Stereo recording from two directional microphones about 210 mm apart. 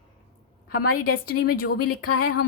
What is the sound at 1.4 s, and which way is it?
Speech, 45° left (ahead or behind).